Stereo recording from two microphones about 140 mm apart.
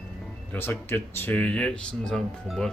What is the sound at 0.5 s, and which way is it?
Speech, 15° left (ahead or behind).